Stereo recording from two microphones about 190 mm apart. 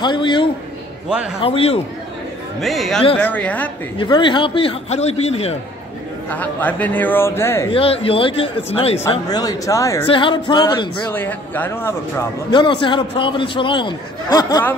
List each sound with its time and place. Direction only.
0.0 s a man's voice: 25° left (ahead or behind)
1.0 s a man's voice: 5° right (ahead or behind)
1.4 s a man's voice: 30° left (ahead or behind)
2.6 s a man's voice: centre (ahead or behind)
4.0 s a man's voice: 25° left (ahead or behind)
6.3 s a man's voice: 10° left (ahead or behind)
7.7 s a man's voice: 30° left (ahead or behind)
9.1 s a man's voice: 20° left (ahead or behind)
10.0 s a man's voice: 25° left (ahead or behind)
11.1 s a man's voice: 10° left (ahead or behind)
12.4 s a man's voice: 25° left (ahead or behind)